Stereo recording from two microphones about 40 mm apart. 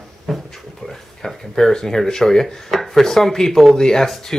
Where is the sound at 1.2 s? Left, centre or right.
Centre.